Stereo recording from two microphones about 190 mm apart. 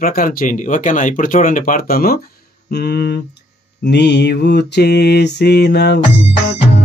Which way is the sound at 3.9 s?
65° left (ahead or behind).